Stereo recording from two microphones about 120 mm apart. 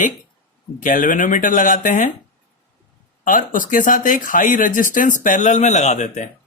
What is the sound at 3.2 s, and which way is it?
Speech, 90° left.